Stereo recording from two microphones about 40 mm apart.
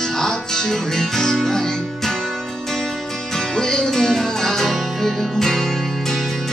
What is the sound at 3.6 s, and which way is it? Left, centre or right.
Music, centre.